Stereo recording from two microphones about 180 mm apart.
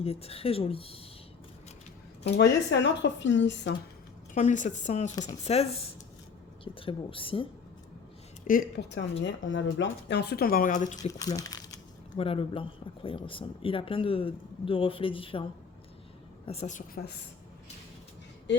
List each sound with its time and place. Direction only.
0.0 s speech: 35° left (ahead or behind)
2.2 s speech: 75° left (ahead or behind)
4.4 s speech: 40° left (ahead or behind)
6.7 s speech: 30° left (ahead or behind)
8.4 s a woman's voice: 50° left (ahead or behind)
8.9 s speech: 80° left; by 11.1 s 45° left (ahead or behind)
11.1 s speech: 20° left (ahead or behind)
12.1 s speech: 30° left (ahead or behind)
16.5 s a woman's voice: 40° left (ahead or behind)